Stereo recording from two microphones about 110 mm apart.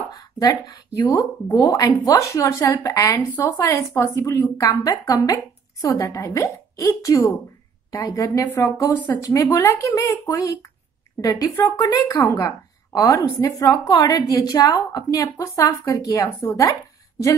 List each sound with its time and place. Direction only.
0.1 s a woman's voice: 35° left (ahead or behind)